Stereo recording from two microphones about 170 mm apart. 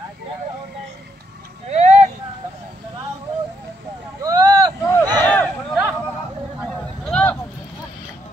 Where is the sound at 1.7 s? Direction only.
40° right (ahead or behind).